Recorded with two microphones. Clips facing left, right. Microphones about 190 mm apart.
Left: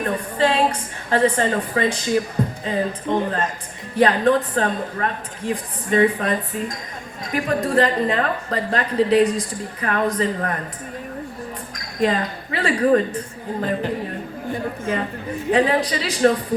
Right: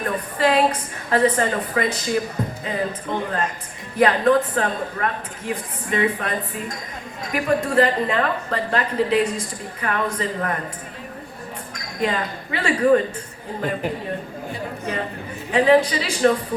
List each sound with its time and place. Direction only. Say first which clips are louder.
0.0 s a woman's voice: left 1 dB; 30° left (ahead or behind)
12.0 s speech: left 3 dB; 35° left (ahead or behind)
14.5 s a man's voice: left 4 dB; 45° left (ahead or behind)
15.5 s speech: right 3 dB; 35° left (ahead or behind)